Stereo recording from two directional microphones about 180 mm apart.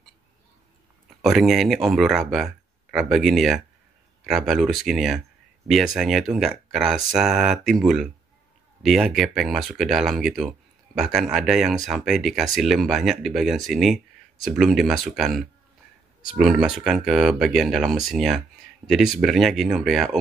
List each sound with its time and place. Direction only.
1.2 s speech: centre (ahead or behind)